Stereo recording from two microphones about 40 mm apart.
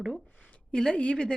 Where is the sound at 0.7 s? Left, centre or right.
Left.